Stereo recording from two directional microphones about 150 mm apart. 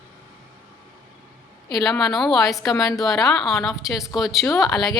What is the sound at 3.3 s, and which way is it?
A woman's voice, centre (ahead or behind).